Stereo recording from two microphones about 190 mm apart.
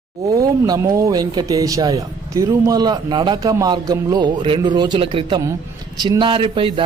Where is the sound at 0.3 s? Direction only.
15° right (ahead or behind).